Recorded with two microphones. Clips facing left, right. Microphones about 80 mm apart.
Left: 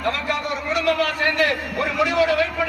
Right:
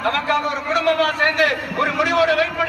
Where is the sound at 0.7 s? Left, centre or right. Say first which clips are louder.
Right 3 dB; right.